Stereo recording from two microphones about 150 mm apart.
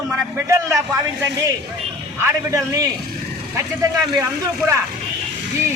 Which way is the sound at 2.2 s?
20° right (ahead or behind).